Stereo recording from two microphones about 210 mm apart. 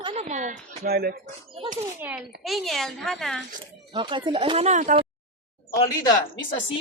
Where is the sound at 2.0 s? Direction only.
10° right (ahead or behind).